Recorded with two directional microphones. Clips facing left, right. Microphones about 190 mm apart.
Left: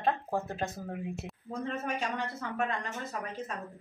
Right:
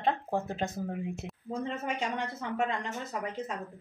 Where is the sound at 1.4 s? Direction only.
20° right (ahead or behind).